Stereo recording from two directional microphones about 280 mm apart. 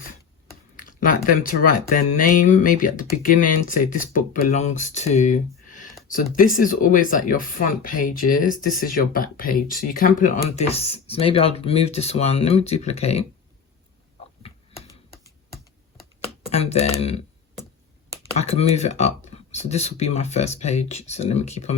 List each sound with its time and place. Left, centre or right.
0.8 s speech: left
15.1 s computer keyboard: centre
16.5 s speech: left
18.3 s speech: left